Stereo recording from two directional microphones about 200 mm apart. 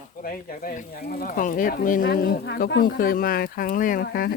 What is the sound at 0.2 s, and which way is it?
Speech, 45° left (ahead or behind).